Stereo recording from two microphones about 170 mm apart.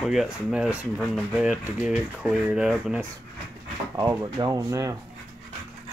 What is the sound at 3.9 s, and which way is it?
Speech, 20° right (ahead or behind).